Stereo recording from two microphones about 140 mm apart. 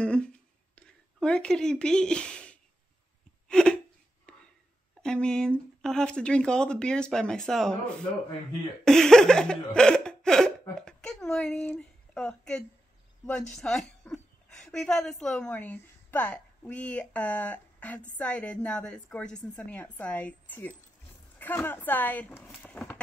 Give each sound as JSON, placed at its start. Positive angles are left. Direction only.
{"t": 0.0, "sound": "a sound", "side_deg": 5}
{"t": 0.7, "sound": "speech", "side_deg": 5}
{"t": 3.4, "sound": "hiccup", "side_deg": 5}
{"t": 4.3, "sound": "whispering", "side_deg": 10}
{"t": 5.0, "sound": "speech", "side_deg": 5}
{"t": 8.8, "sound": "a sound", "side_deg": 5}
{"t": 9.8, "sound": "laughter", "side_deg": 5}
{"t": 10.7, "sound": "a woman's voice", "side_deg": 5}
{"t": 22.6, "sound": "a sound", "side_deg": 10}